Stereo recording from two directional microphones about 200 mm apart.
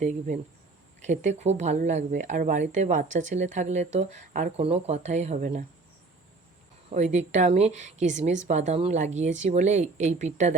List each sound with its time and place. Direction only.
1.0 s speech: 35° right (ahead or behind)
6.9 s speech: 35° right (ahead or behind)